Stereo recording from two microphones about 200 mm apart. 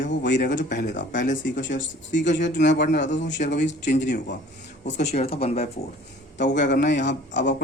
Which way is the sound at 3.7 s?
40° left (ahead or behind).